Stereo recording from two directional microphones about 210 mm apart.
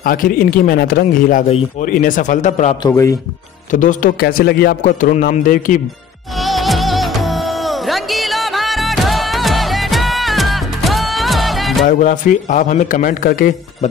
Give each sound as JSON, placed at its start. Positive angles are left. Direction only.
{"t": 0.0, "sound": "a man's voice", "side_deg": 40}
{"t": 2.8, "sound": "speech", "side_deg": 15}
{"t": 3.7, "sound": "a man's voice", "side_deg": 40}
{"t": 6.3, "sound": "music", "side_deg": 0}
{"t": 11.9, "sound": "a man's voice", "side_deg": 40}